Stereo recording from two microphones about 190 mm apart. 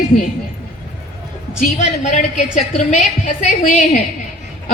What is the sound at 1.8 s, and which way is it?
A woman's voice, 40° left (ahead or behind).